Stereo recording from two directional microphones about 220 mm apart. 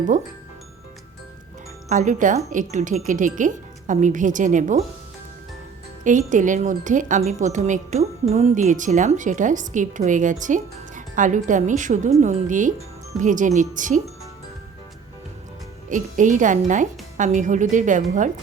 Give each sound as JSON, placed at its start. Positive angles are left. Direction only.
{"t": 1.9, "sound": "a woman's voice", "side_deg": -35}
{"t": 6.1, "sound": "a woman's voice", "side_deg": -35}
{"t": 15.9, "sound": "a woman's voice", "side_deg": -35}